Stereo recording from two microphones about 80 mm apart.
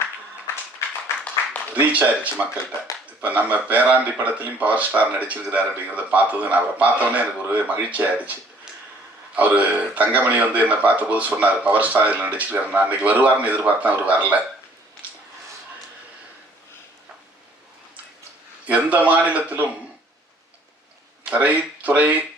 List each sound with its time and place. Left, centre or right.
1.7 s a man's voice: centre
18.6 s a man's voice: centre
21.2 s speech: centre